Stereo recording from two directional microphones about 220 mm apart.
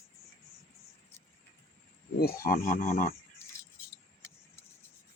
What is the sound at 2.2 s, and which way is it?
Speech, 45° left (ahead or behind).